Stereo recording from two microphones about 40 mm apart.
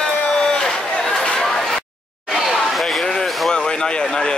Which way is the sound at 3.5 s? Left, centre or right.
Left.